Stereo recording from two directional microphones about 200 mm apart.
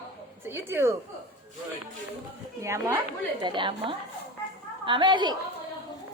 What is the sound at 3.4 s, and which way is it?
A woman's voice, 25° right (ahead or behind).